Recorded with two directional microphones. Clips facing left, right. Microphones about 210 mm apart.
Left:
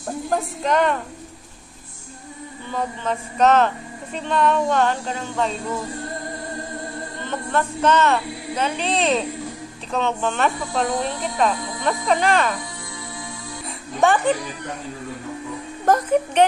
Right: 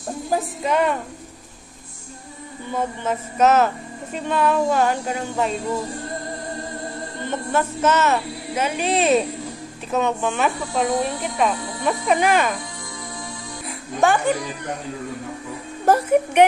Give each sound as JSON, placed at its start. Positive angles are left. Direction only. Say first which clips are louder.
{"t": 0.6, "sound": "speech", "louder": "left 1 dB", "side_deg": -5}
{"t": 3.1, "sound": "speech", "louder": "even", "side_deg": -5}
{"t": 7.2, "sound": "speech", "louder": "right 1 dB", "side_deg": -5}
{"t": 13.7, "sound": "music", "louder": "even", "side_deg": 0}
{"t": 15.8, "sound": "speech", "louder": "right 1 dB", "side_deg": -10}